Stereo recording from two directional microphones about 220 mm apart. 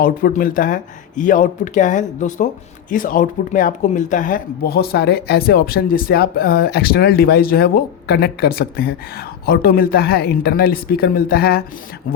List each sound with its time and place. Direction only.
0.0 s speech: 40° left (ahead or behind)